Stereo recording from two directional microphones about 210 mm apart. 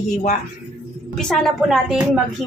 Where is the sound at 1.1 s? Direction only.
Centre (ahead or behind).